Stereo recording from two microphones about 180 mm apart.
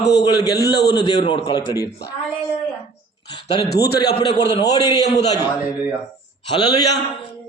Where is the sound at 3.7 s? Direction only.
65° left (ahead or behind).